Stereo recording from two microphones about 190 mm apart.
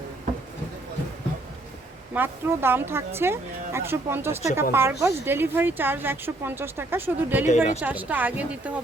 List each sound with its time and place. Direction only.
2.1 s a woman's voice: 10° right (ahead or behind)
7.4 s speech: 40° left (ahead or behind)
7.8 s a woman's voice: 10° right (ahead or behind)